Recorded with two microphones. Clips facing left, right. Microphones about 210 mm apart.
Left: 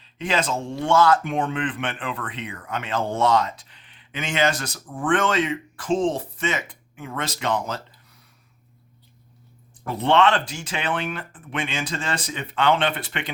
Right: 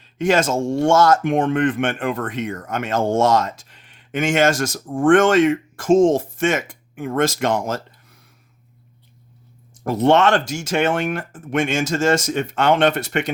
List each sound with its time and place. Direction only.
0.2 s speech: 45° right (ahead or behind)
9.8 s speech: 45° right (ahead or behind)